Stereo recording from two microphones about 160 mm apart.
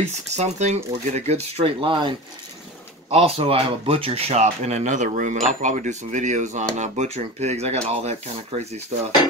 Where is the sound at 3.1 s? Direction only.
40° right (ahead or behind).